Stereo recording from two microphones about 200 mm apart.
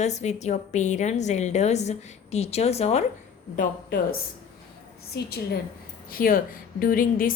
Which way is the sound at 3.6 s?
50° left (ahead or behind).